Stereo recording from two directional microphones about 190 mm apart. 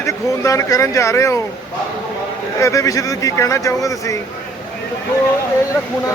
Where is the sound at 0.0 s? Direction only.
15° left (ahead or behind).